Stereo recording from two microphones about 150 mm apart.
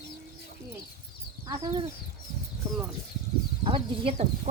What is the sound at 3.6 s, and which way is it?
Speech, 40° right (ahead or behind).